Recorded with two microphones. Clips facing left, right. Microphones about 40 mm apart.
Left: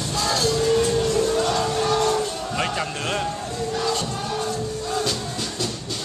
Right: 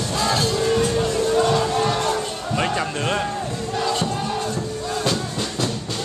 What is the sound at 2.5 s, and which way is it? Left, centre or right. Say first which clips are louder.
Speech: right 3 dB; centre.